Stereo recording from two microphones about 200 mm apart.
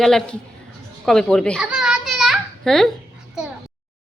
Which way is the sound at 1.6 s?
5° right (ahead or behind).